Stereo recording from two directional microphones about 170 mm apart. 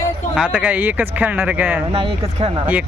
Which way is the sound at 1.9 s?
35° right (ahead or behind).